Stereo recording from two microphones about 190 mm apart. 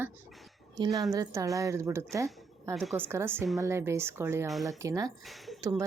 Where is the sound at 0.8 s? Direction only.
20° right (ahead or behind).